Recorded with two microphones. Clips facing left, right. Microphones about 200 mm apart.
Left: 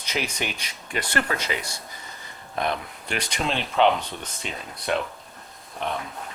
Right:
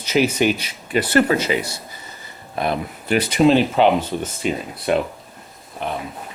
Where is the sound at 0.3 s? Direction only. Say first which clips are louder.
Right 13 dB; 5° right (ahead or behind).